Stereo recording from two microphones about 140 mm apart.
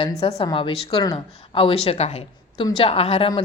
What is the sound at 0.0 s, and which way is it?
A woman's voice, 45° left (ahead or behind).